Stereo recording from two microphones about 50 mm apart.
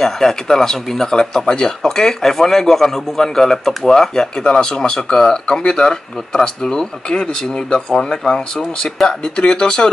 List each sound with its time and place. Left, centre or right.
0.0 s speech: centre